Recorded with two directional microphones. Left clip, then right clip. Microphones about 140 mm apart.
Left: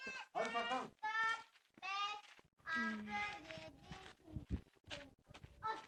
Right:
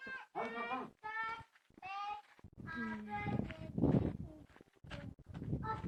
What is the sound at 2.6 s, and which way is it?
Music, 30° left (ahead or behind).